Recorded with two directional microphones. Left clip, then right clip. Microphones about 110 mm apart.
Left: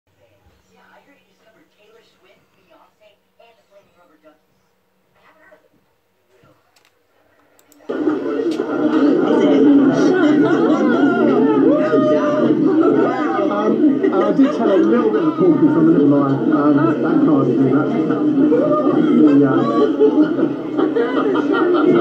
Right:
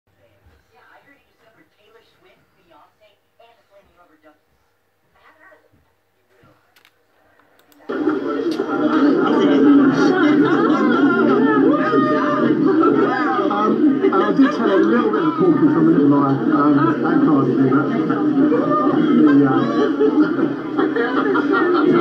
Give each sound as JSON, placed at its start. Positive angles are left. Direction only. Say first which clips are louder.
{"t": 8.0, "sound": "television", "louder": "left 1 dB", "side_deg": -20}
{"t": 16.1, "sound": "speech", "louder": "left 1 dB", "side_deg": -15}
{"t": 18.9, "sound": "speech", "louder": "left 1 dB", "side_deg": -15}